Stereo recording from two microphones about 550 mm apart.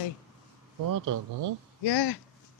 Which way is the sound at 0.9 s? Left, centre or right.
Right.